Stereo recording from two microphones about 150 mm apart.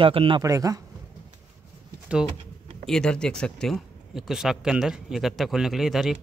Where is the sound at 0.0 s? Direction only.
40° right (ahead or behind).